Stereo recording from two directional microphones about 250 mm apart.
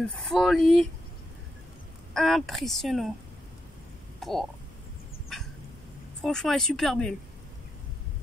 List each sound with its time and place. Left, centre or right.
0.1 s speech: centre
2.1 s speech: centre
4.2 s speech: centre
6.2 s speech: centre